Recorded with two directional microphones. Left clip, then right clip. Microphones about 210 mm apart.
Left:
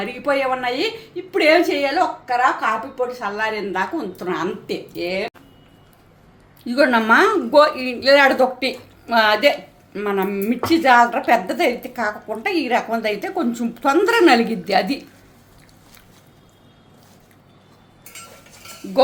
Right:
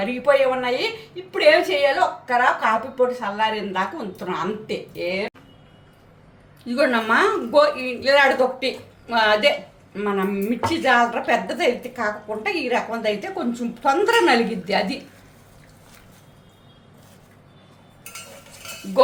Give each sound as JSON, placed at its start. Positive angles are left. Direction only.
{"t": 0.3, "sound": "a woman's voice", "side_deg": 25}
{"t": 6.7, "sound": "a woman's voice", "side_deg": 35}